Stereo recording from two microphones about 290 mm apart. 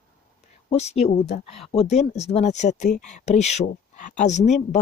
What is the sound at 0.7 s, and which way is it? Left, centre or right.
Speech, left.